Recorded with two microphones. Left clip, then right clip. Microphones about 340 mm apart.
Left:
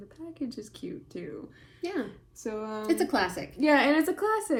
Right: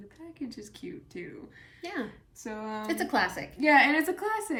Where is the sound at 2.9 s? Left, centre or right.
Centre.